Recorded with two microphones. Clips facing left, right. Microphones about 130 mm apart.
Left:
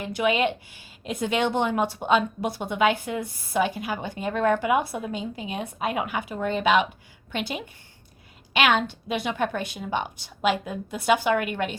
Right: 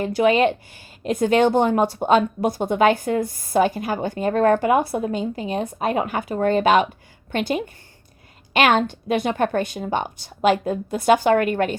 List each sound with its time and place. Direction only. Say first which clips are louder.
0.0 s a woman's voice: right 6 dB; 40° right (ahead or behind)